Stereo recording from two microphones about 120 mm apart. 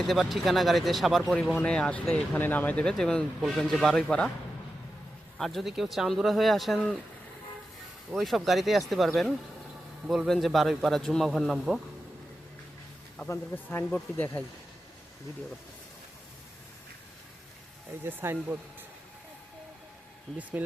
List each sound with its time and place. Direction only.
0.1 s speech: centre (ahead or behind)
5.4 s speech: centre (ahead or behind)
8.1 s speech: centre (ahead or behind)
13.1 s speech: 20° left (ahead or behind)
18.0 s speech: 20° right (ahead or behind)
20.3 s speech: centre (ahead or behind)